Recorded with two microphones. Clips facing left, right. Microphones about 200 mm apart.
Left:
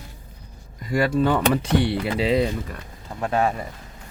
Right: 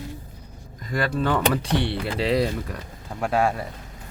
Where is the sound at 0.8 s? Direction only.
10° left (ahead or behind).